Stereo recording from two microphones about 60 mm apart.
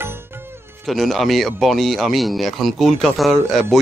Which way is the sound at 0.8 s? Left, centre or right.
Centre.